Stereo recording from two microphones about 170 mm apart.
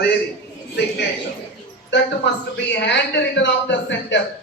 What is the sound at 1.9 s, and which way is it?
A man's voice, 90° left.